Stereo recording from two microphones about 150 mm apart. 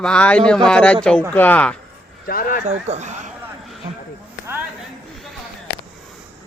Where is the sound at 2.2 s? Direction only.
70° left (ahead or behind).